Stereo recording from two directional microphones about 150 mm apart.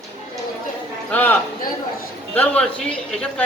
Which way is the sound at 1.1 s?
15° left (ahead or behind).